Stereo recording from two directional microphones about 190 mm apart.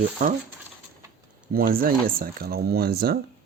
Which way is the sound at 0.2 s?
50° right (ahead or behind).